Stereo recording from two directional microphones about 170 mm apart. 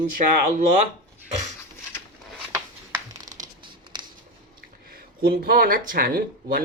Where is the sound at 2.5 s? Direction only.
15° right (ahead or behind).